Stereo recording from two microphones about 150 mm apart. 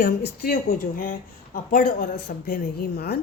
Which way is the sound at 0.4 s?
90° left.